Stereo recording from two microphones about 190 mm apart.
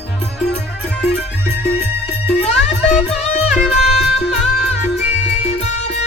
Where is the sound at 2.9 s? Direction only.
35° left (ahead or behind).